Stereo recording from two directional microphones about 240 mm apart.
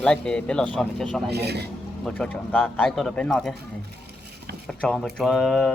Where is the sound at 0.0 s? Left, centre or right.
Centre.